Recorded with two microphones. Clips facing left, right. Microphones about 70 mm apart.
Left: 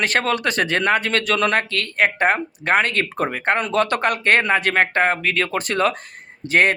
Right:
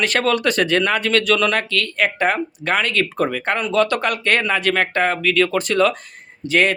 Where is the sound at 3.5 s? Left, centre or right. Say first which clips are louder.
Right 4 dB; left.